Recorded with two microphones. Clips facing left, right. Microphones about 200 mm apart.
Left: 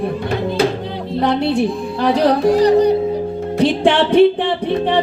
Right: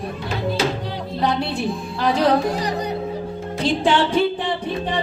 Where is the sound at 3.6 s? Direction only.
65° left (ahead or behind).